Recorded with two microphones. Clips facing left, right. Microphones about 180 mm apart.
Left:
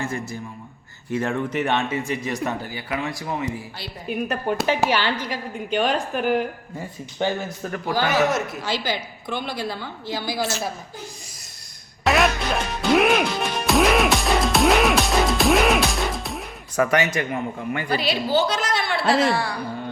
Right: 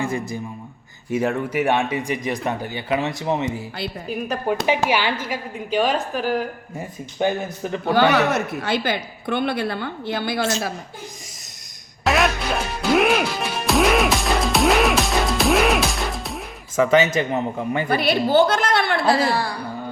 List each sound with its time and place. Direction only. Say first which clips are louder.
0.0 s speech: right 4 dB; 15° right (ahead or behind)
4.1 s a woman's voice: even; centre (ahead or behind)
4.6 s a woman's voice: even; 10° right (ahead or behind)
7.9 s a woman's voice: right 3 dB; 65° right (ahead or behind)
12.0 s music: even; centre (ahead or behind)
16.8 s speech: right 4 dB; 25° right (ahead or behind)
17.8 s a woman's voice: right 4 dB; 55° right (ahead or behind)
19.0 s a woman's voice: right 1 dB; 35° right (ahead or behind)